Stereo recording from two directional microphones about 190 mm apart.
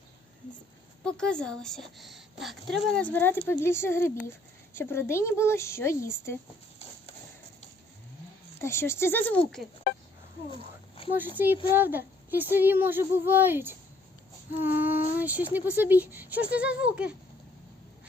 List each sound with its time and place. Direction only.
1.0 s a woman's voice: 5° left (ahead or behind)
8.6 s speech: 15° left (ahead or behind)
10.5 s a sound: 30° left (ahead or behind)
11.1 s speech: 10° right (ahead or behind)